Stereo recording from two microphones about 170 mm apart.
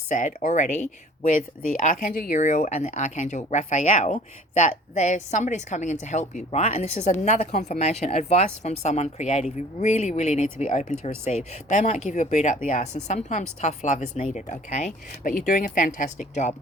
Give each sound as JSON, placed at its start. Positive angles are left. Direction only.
{"t": 0.1, "sound": "speech", "side_deg": 45}